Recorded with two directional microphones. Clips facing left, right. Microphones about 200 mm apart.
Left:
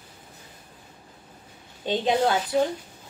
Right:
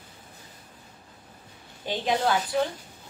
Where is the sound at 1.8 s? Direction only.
20° left (ahead or behind).